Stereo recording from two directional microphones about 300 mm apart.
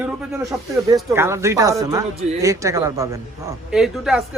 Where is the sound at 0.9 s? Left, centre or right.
Centre.